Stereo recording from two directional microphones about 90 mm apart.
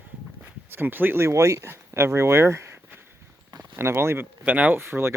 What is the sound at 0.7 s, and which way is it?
Speech, 25° right (ahead or behind).